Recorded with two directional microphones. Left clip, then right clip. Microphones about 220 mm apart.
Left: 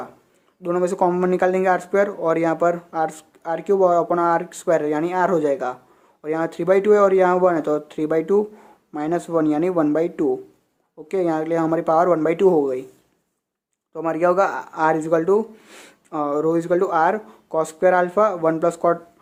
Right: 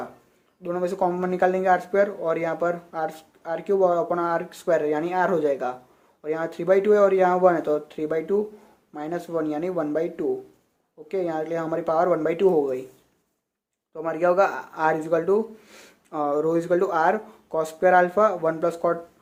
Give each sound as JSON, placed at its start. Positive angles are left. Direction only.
{"t": 0.6, "sound": "speech", "side_deg": 25}
{"t": 13.9, "sound": "speech", "side_deg": 20}